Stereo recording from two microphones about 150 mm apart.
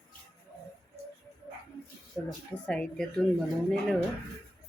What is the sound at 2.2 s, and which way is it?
Speech, 20° left (ahead or behind).